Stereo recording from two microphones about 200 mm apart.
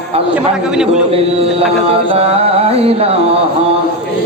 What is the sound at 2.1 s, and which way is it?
Carnatic music, 30° right (ahead or behind).